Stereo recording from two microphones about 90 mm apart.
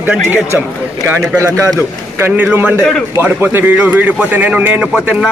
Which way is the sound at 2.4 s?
20° right (ahead or behind).